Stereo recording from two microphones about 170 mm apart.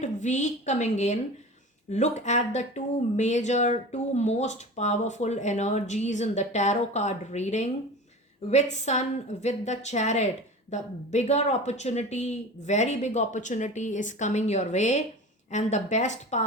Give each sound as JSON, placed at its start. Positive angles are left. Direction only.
{"t": 0.0, "sound": "a woman's voice", "side_deg": 45}